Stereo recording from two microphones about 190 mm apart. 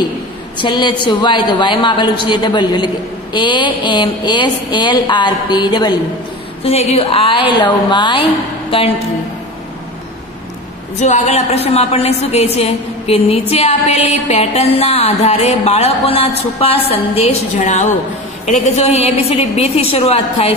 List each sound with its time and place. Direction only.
0.6 s speech: 25° left (ahead or behind)
6.6 s a woman's voice: 35° left (ahead or behind)
11.0 s a woman's voice: 40° left (ahead or behind)